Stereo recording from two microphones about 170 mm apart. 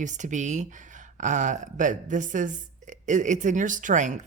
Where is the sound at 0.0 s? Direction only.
45° right (ahead or behind).